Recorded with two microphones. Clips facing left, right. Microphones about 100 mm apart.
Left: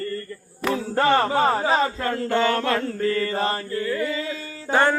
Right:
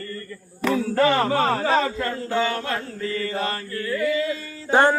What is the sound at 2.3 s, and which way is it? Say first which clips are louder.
Mantra: left 4 dB; 80° left.